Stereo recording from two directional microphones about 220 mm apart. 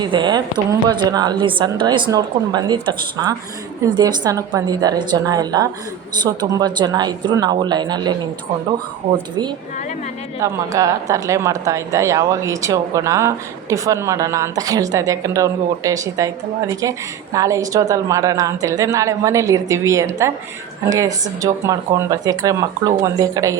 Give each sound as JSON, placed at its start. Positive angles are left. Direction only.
{"t": 0.0, "sound": "a woman's voice", "side_deg": -20}
{"t": 10.4, "sound": "speech", "side_deg": -15}